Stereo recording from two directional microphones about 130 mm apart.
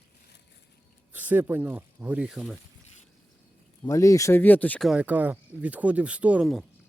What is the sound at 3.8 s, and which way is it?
Speech, 25° left (ahead or behind).